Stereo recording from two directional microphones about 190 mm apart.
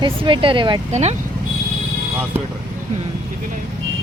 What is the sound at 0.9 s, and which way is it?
Speech, 35° right (ahead or behind).